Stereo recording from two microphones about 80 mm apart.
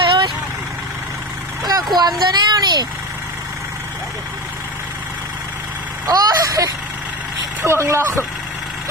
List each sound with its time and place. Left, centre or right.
0.0 s vehicle: right
1.9 s speech: right
6.1 s speech: right
7.6 s speech: right